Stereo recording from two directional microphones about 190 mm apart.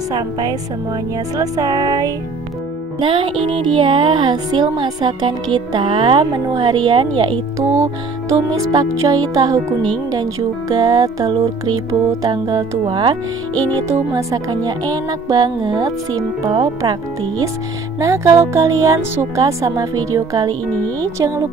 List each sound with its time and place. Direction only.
0.1 s speech: 20° right (ahead or behind)
17.9 s speech: 15° right (ahead or behind)
20.7 s speech: 10° left (ahead or behind)